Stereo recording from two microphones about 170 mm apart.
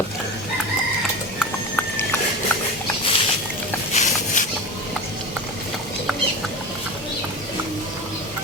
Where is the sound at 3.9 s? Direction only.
45° left (ahead or behind).